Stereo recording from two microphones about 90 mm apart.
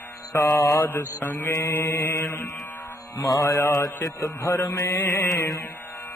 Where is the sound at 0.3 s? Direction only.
40° left (ahead or behind).